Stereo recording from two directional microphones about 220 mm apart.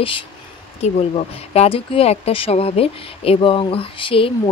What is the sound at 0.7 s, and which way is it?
Speech, 30° left (ahead or behind).